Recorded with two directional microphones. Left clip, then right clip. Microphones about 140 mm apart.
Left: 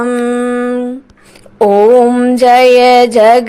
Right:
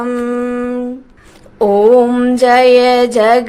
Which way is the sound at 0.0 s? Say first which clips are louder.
Left 4 dB; 20° left (ahead or behind).